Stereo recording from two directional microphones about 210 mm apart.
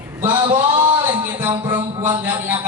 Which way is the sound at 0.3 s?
20° right (ahead or behind).